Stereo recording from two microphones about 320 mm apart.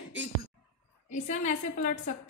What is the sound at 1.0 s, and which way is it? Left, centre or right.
Speech, left.